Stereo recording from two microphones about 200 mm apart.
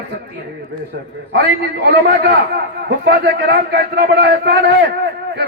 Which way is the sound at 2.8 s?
55° right (ahead or behind).